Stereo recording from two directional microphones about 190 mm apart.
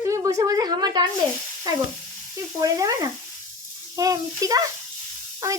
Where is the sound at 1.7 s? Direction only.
20° right (ahead or behind).